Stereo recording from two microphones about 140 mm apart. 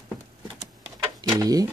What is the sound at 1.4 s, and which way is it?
Speech, 25° right (ahead or behind).